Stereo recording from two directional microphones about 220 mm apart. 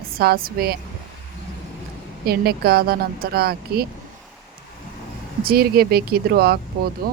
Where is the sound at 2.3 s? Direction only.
45° right (ahead or behind).